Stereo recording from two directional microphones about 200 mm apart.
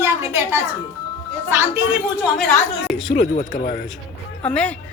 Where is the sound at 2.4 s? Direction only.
Centre (ahead or behind).